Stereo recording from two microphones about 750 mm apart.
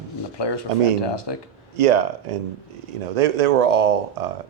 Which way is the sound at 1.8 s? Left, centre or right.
Right.